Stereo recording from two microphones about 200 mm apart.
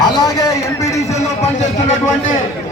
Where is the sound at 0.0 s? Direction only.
15° left (ahead or behind).